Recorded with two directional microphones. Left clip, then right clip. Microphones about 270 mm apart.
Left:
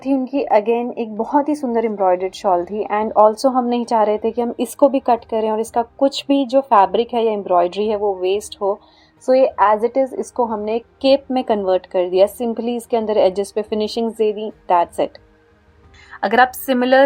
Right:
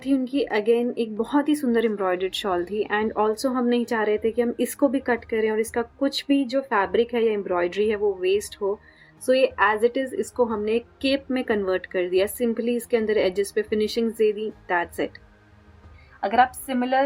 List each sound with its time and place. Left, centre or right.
0.0 s a woman's voice: centre
16.2 s a woman's voice: left